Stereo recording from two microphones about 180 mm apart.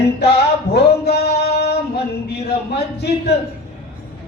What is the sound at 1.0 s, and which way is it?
Music, 65° left (ahead or behind).